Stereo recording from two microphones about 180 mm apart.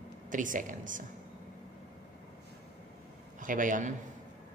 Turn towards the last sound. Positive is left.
turn(degrees=-45)  # may be behind; listen again after turning